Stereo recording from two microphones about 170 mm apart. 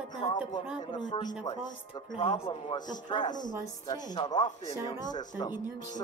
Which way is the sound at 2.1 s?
35° left (ahead or behind).